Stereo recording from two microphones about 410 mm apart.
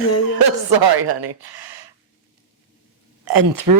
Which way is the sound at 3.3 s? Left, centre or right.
Right.